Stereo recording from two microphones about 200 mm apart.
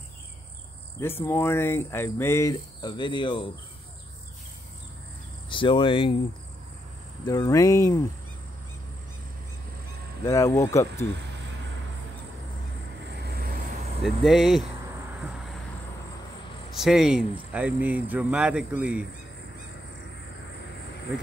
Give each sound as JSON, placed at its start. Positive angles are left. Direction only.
{"t": 0.9, "sound": "speech", "side_deg": 10}
{"t": 5.5, "sound": "speech", "side_deg": 25}
{"t": 7.2, "sound": "speech", "side_deg": 15}
{"t": 10.2, "sound": "speech", "side_deg": 15}
{"t": 13.2, "sound": "vehicle", "side_deg": -55}
{"t": 14.0, "sound": "speech", "side_deg": 0}
{"t": 16.7, "sound": "speech", "side_deg": 0}